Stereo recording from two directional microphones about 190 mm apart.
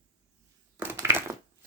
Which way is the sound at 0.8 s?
10° right (ahead or behind).